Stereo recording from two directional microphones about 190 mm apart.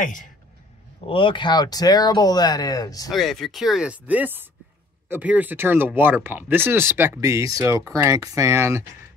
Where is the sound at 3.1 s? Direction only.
Centre (ahead or behind).